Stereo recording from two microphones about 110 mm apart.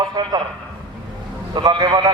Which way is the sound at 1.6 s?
40° right (ahead or behind).